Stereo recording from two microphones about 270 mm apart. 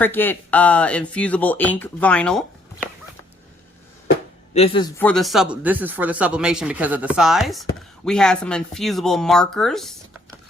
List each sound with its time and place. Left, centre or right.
0.0 s speech: centre
4.5 s a man's voice: left
4.9 s speech: centre